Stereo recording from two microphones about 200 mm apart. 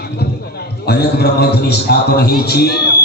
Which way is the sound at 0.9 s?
55° left (ahead or behind).